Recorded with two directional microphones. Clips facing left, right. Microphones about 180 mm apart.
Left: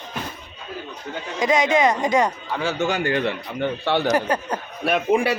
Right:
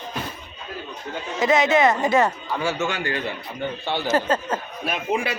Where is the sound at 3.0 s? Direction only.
65° left (ahead or behind).